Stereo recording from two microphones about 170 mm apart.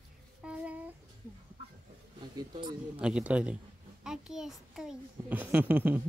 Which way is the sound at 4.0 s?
5° right (ahead or behind).